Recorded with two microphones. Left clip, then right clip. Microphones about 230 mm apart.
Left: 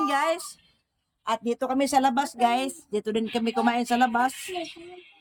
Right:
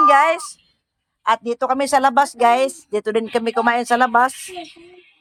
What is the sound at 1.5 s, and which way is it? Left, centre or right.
Speech, centre.